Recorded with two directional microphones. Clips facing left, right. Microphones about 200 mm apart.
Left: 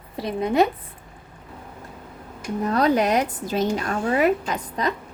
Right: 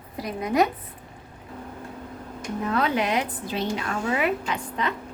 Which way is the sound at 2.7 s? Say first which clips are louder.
Left 5 dB; 40° left (ahead or behind).